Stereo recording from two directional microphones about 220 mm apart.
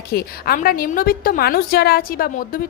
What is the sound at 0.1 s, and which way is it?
A woman's voice, 45° left (ahead or behind).